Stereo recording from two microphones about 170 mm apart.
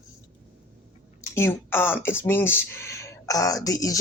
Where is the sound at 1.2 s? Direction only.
15° left (ahead or behind).